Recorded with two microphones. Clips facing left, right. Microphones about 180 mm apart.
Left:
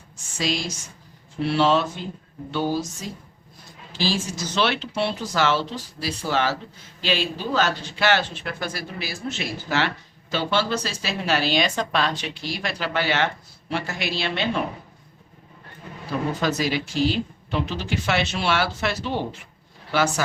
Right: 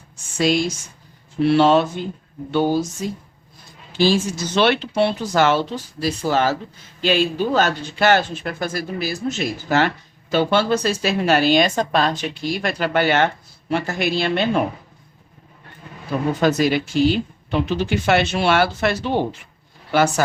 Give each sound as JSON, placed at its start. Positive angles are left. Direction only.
{"t": 0.3, "sound": "a woman's voice", "side_deg": -55}
{"t": 16.4, "sound": "speech", "side_deg": -55}